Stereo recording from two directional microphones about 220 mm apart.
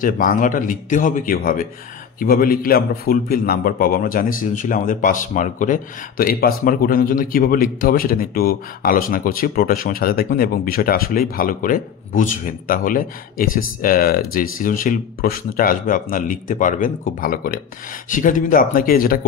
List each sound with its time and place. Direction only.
0.0 s a man's voice: 40° left (ahead or behind)